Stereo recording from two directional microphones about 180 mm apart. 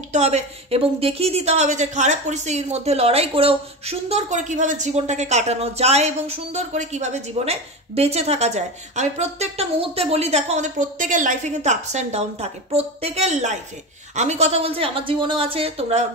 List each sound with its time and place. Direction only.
0.1 s a woman's voice: 35° right (ahead or behind)